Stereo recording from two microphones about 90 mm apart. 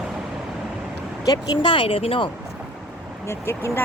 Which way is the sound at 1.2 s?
50° left (ahead or behind).